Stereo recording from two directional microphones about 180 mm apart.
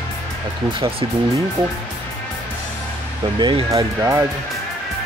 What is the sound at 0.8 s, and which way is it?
Speech, 30° right (ahead or behind).